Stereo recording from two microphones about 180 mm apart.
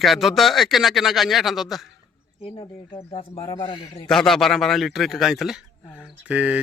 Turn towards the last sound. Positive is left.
turn(degrees=-5)  # may be behind; listen again after turning